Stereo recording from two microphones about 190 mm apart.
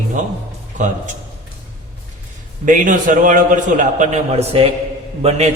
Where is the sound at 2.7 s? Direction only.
45° right (ahead or behind).